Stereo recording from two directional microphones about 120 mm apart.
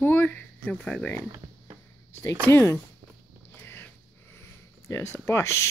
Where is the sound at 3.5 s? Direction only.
20° left (ahead or behind).